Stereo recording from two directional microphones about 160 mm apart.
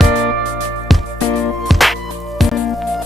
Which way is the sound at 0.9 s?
Centre (ahead or behind).